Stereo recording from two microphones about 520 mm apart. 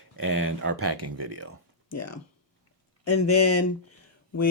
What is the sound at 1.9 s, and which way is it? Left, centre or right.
Speech, left.